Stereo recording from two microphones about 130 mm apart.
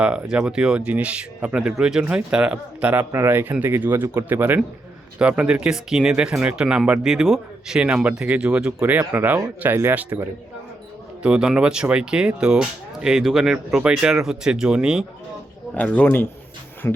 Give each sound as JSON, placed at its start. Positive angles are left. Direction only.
{"t": 0.0, "sound": "speech", "side_deg": -10}
{"t": 15.7, "sound": "speech", "side_deg": 10}